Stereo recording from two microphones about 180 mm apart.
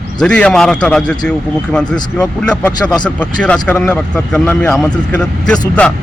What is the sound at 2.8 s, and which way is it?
Speech, 20° left (ahead or behind).